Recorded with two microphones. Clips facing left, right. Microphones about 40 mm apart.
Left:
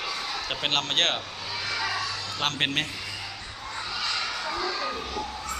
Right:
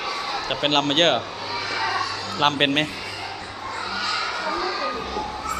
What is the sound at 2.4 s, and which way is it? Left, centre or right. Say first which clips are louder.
Speech: right 7 dB; centre.